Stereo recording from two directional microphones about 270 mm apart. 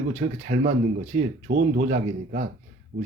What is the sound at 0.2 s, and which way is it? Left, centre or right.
Speech, right.